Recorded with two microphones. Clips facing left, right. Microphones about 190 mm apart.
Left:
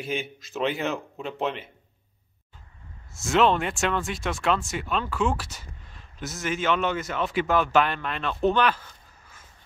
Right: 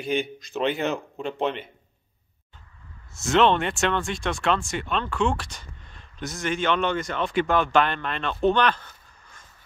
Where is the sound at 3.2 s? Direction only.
Centre (ahead or behind).